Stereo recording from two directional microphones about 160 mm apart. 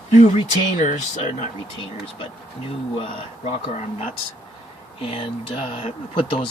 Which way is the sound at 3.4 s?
40° left (ahead or behind).